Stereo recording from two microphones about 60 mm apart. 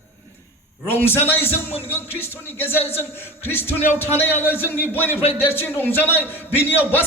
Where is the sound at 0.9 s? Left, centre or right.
Left.